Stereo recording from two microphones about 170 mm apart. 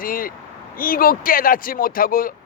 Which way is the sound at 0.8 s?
55° left (ahead or behind).